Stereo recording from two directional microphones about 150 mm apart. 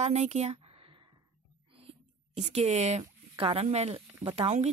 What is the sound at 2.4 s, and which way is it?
Speech, 50° right (ahead or behind).